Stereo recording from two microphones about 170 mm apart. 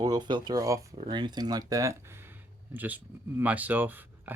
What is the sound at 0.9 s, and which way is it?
Speech, 30° right (ahead or behind).